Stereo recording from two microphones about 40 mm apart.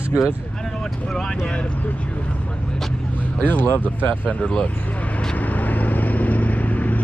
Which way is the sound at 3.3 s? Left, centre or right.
Left.